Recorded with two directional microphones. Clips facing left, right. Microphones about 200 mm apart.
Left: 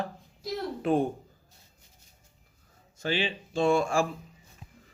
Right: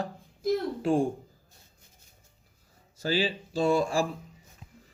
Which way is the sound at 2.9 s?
35° right (ahead or behind).